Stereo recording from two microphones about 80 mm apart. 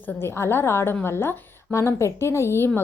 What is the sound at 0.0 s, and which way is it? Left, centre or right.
A woman's voice, left.